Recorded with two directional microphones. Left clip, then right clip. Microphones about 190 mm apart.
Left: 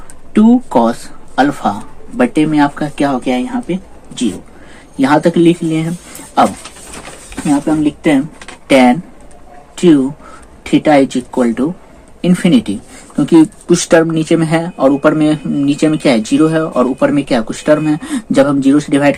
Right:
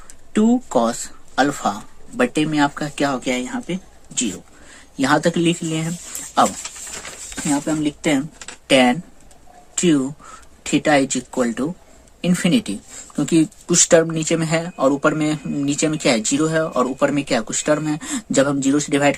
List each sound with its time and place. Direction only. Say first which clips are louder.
0.3 s speech: left 7 dB; 30° right (ahead or behind)
4.9 s speech: left 7 dB; 30° right (ahead or behind)
7.0 s a sound: left 7 dB; 40° right (ahead or behind)
8.6 s speech: left 6 dB; 30° right (ahead or behind)